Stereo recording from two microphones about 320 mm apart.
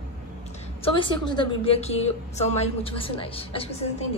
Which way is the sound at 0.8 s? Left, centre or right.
Centre.